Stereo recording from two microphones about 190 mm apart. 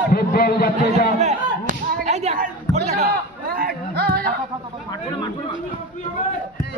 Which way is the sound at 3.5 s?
50° right (ahead or behind).